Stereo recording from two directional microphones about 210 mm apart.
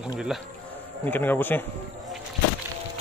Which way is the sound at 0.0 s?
5° right (ahead or behind).